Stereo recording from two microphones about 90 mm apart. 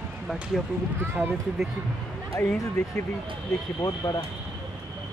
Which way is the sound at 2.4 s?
25° left (ahead or behind).